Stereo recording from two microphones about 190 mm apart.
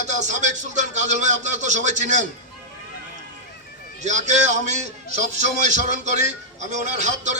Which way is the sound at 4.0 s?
40° right (ahead or behind).